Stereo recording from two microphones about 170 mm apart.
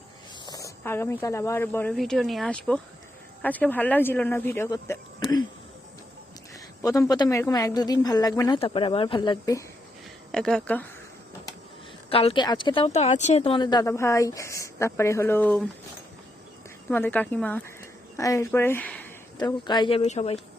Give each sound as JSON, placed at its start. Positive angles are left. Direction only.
{"t": 0.4, "sound": "speech", "side_deg": 20}
{"t": 2.0, "sound": "speech", "side_deg": 0}
{"t": 6.8, "sound": "speech", "side_deg": 20}
{"t": 8.5, "sound": "speech", "side_deg": 30}
{"t": 10.3, "sound": "speech", "side_deg": 5}
{"t": 12.1, "sound": "speech", "side_deg": 30}
{"t": 16.9, "sound": "speech", "side_deg": 10}
{"t": 19.4, "sound": "speech", "side_deg": 25}
{"t": 20.0, "sound": "speech", "side_deg": 40}